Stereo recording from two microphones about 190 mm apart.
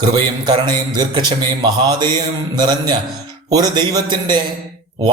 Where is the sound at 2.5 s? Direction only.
20° right (ahead or behind).